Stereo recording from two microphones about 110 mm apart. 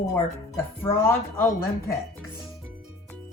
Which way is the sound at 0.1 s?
20° left (ahead or behind).